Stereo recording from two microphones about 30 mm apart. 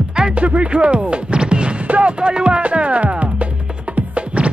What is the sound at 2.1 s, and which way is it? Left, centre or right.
Music, right.